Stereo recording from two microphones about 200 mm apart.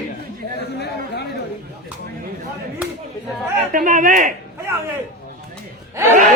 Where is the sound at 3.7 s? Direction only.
40° right (ahead or behind).